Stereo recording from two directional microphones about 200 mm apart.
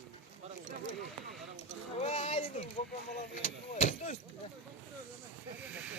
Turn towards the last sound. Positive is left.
turn(degrees=35)  # may be behind; listen again after turning